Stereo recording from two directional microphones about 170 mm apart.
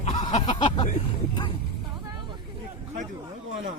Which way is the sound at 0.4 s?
30° left (ahead or behind).